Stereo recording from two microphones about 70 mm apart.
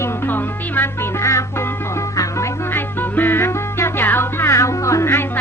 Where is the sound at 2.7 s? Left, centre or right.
Left.